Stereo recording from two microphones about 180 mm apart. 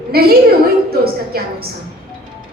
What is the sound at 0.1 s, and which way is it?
Speech, 60° right (ahead or behind).